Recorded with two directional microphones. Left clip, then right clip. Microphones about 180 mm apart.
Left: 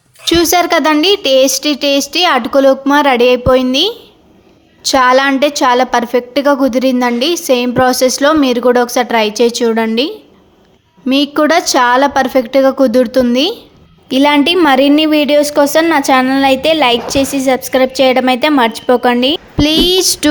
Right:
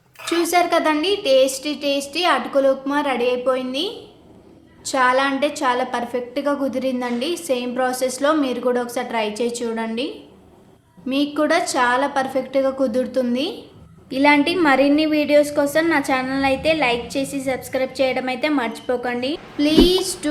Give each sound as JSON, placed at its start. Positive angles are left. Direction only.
{"t": 0.3, "sound": "a woman's voice", "side_deg": 50}